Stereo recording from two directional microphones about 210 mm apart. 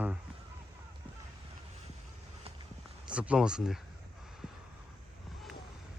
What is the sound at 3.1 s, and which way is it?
Speech, 5° right (ahead or behind).